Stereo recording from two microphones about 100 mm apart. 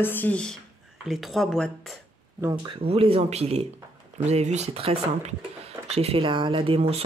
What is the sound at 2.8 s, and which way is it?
Speech, 75° right (ahead or behind).